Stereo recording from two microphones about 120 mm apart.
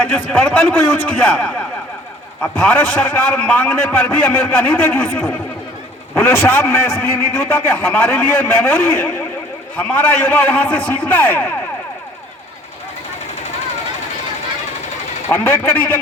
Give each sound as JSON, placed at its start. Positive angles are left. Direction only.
{"t": 0.3, "sound": "a man's voice", "side_deg": 15}
{"t": 15.3, "sound": "a man's voice", "side_deg": 15}